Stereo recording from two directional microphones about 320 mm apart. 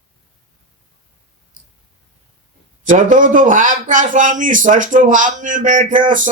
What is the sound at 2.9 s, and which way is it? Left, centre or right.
A man's voice, right.